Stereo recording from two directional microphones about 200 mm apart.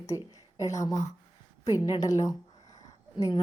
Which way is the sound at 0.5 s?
15° left (ahead or behind).